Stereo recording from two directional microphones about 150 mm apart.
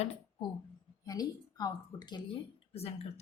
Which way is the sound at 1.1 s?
25° left (ahead or behind).